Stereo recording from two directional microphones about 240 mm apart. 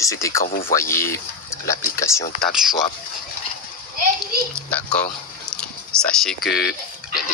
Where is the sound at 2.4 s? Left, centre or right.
Centre.